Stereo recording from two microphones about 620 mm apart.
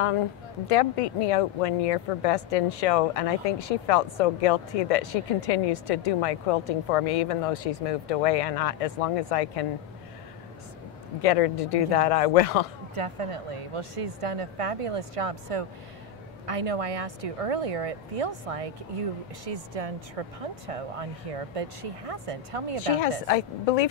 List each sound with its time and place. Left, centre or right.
0.7 s speech: left
11.2 s speech: left
12.9 s speech: right
22.9 s speech: left